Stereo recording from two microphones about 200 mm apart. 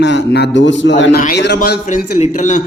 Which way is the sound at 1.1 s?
45° left (ahead or behind).